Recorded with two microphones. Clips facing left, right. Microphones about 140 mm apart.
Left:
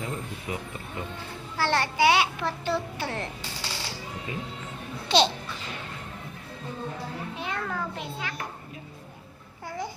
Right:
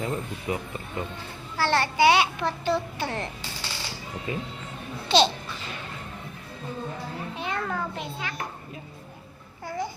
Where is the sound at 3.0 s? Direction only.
5° left (ahead or behind).